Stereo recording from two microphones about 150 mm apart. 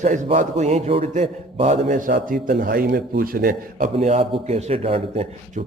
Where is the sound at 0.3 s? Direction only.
50° right (ahead or behind); by 3.9 s 70° right (ahead or behind).